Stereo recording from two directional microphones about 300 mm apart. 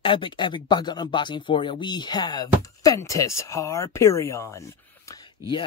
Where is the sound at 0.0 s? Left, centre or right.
Centre.